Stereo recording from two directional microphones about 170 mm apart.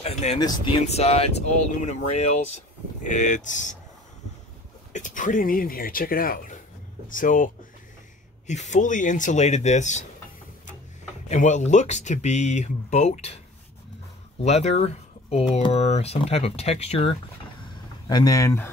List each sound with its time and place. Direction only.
0.0 s a sound: 40° left (ahead or behind)
0.8 s speech: 35° left (ahead or behind)
4.9 s speech: 50° left (ahead or behind)
11.2 s speech: 45° left (ahead or behind)
14.4 s speech: 40° left (ahead or behind)
18.0 s speech: 25° left (ahead or behind)